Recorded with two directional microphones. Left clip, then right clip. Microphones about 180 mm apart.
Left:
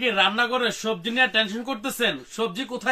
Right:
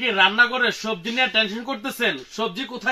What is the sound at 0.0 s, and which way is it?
Speech, 25° left (ahead or behind).